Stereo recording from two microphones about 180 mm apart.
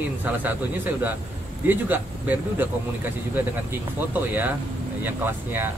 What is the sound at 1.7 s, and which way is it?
Speech, 10° right (ahead or behind).